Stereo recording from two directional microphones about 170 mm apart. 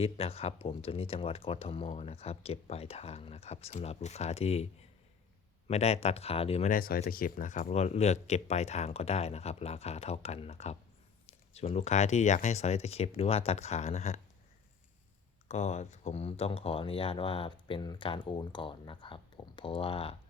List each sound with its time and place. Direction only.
0.0 s speech: 35° left (ahead or behind)
6.7 s speech: 60° left (ahead or behind); by 14.2 s 40° left (ahead or behind)
15.4 s speech: 40° left (ahead or behind)